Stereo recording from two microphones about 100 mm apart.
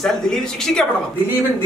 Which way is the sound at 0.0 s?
5° left (ahead or behind).